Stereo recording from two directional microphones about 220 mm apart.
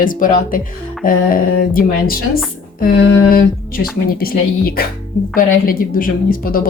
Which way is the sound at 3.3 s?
40° left (ahead or behind).